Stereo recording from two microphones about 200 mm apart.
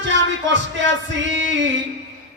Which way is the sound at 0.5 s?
65° right (ahead or behind).